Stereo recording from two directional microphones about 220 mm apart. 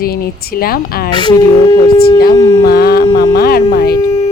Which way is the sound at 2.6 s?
45° left (ahead or behind).